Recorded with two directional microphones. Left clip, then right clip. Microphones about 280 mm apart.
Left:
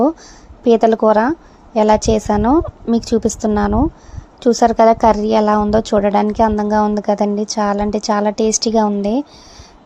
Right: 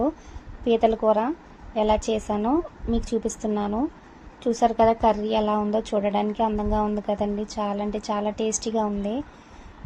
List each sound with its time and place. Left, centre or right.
0.6 s a woman's voice: left